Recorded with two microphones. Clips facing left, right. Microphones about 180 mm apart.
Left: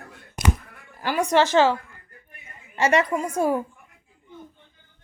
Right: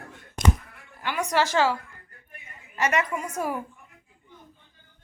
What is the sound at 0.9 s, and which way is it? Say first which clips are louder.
Speech: left 5 dB; 40° left (ahead or behind).